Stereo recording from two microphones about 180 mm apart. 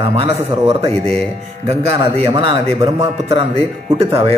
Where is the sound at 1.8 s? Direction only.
35° right (ahead or behind).